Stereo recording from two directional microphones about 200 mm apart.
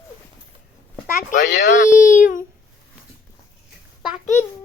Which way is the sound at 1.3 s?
40° left (ahead or behind).